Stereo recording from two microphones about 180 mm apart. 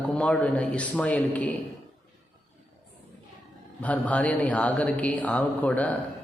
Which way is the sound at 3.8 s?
10° left (ahead or behind).